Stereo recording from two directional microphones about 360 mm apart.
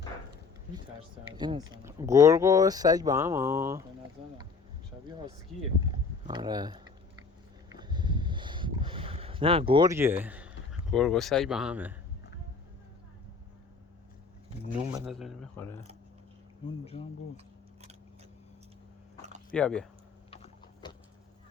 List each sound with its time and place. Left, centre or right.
1.4 s speech: centre
6.2 s speech: centre
7.7 s a sound: centre
14.8 s speech: centre
15.1 s speech: centre
16.6 s speech: centre
19.5 s speech: centre
20.3 s a sound: centre